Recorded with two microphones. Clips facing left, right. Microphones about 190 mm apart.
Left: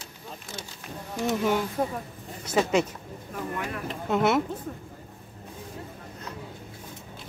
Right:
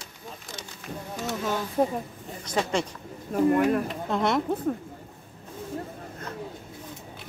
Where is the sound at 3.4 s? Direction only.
45° right (ahead or behind).